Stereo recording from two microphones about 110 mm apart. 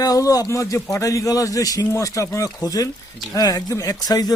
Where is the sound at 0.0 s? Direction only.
35° left (ahead or behind).